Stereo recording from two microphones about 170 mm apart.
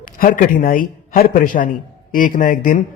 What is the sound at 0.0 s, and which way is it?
A man's voice, 55° left (ahead or behind).